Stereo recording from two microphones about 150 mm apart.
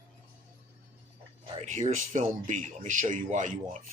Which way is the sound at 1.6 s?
55° right (ahead or behind).